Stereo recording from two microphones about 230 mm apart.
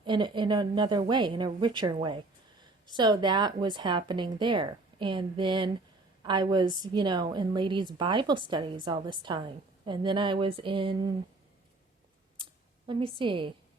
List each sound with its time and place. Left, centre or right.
0.0 s a woman's voice: centre
12.9 s a woman's voice: right